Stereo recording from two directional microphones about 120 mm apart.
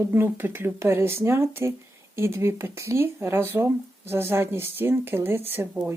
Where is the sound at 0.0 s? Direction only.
20° right (ahead or behind).